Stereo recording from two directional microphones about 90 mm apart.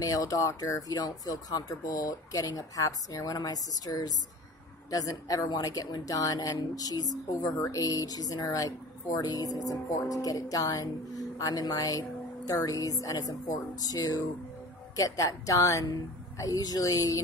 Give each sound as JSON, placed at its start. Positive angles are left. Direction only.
{"t": 0.0, "sound": "speech", "side_deg": 40}